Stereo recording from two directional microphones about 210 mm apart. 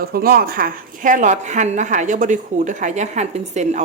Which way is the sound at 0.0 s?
45° right (ahead or behind).